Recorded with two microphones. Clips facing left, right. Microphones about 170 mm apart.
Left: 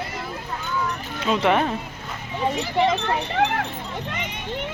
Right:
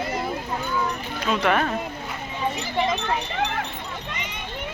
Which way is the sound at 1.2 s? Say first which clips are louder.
Left 2 dB; 20° left (ahead or behind).